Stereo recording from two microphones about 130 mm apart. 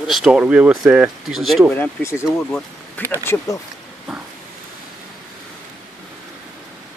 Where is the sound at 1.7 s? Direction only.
20° left (ahead or behind).